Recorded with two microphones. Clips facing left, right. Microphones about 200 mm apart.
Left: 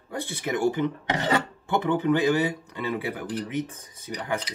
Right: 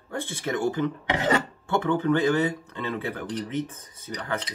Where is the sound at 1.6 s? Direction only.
15° left (ahead or behind).